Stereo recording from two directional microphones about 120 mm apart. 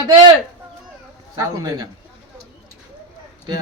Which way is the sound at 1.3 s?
30° right (ahead or behind).